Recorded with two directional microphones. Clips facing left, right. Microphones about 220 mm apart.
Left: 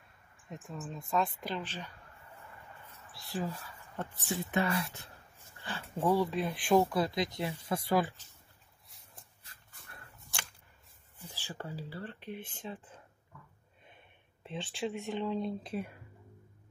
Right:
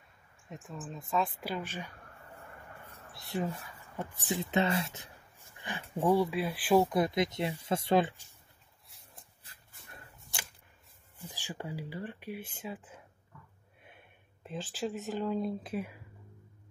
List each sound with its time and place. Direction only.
0.5 s a woman's voice: centre (ahead or behind)
2.8 s a sound: 15° right (ahead or behind)
3.9 s speech: 15° right (ahead or behind)
6.8 s speech: 20° right (ahead or behind)
9.4 s dog: 25° right (ahead or behind)
11.2 s speech: 15° right (ahead or behind)